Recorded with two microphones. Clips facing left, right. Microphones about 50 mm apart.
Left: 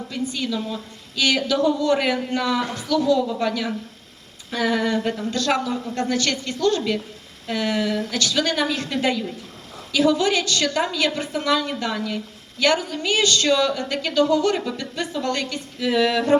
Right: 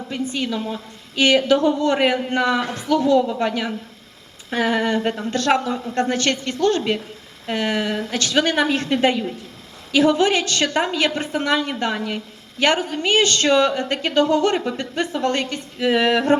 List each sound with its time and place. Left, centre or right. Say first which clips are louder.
0.1 s a woman's voice: right 2 dB; right